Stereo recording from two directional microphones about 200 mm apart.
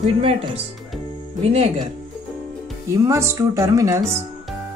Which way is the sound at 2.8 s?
15° right (ahead or behind).